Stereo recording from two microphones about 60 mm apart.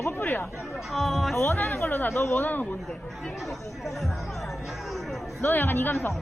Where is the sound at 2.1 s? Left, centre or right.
Left.